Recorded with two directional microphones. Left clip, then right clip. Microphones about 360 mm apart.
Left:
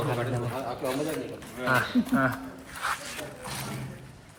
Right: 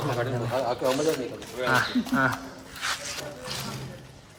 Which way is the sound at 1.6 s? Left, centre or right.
Centre.